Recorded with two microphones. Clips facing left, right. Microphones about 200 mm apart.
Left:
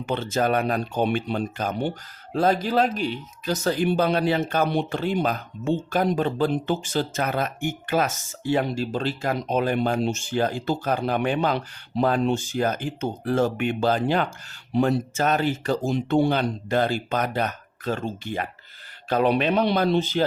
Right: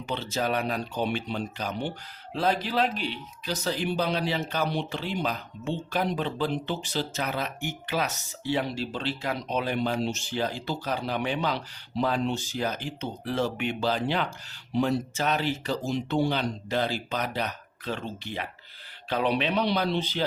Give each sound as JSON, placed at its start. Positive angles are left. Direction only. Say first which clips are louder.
{"t": 0.0, "sound": "speech", "louder": "left 6 dB", "side_deg": 50}